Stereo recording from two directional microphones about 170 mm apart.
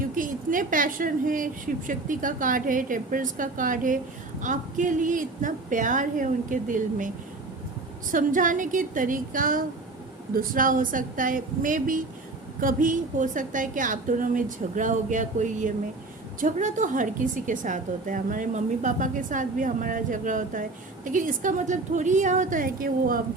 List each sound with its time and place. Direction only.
0.0 s a woman's voice: 55° right (ahead or behind)
8.1 s a woman's voice: 50° right (ahead or behind)